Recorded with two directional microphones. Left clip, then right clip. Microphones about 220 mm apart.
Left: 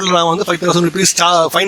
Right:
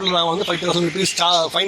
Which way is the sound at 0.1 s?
35° left (ahead or behind).